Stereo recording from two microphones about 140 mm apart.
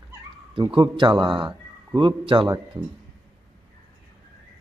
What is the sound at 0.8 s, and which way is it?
Speech, 35° right (ahead or behind).